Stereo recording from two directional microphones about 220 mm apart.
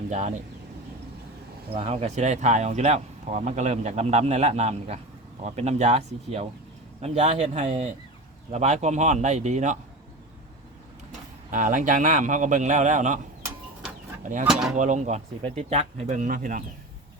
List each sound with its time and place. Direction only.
0.1 s speech: 30° right (ahead or behind)
1.7 s speech: 25° right (ahead or behind)
11.5 s speech: 35° right (ahead or behind)
14.4 s speech: centre (ahead or behind)
14.8 s speech: 35° right (ahead or behind)